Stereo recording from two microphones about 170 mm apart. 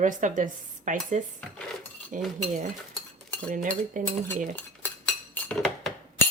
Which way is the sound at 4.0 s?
50° right (ahead or behind).